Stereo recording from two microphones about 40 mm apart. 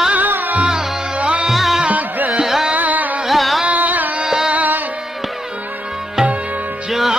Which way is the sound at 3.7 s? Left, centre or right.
Right.